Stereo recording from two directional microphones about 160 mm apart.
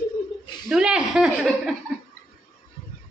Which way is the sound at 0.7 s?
5° right (ahead or behind).